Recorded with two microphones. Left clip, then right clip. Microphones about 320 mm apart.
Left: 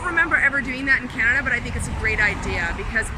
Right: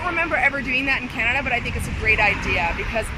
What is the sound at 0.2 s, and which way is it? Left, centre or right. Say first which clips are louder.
Speech: left 3 dB; centre.